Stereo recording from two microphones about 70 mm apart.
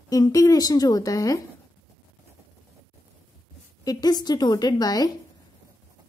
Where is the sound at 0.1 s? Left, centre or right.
Left.